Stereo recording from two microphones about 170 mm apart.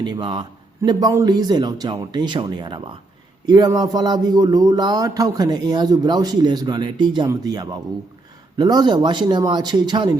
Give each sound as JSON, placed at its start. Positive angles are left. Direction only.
{"t": 0.0, "sound": "speech", "side_deg": -25}